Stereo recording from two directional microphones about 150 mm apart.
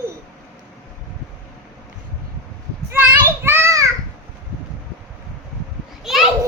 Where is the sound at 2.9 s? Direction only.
15° right (ahead or behind).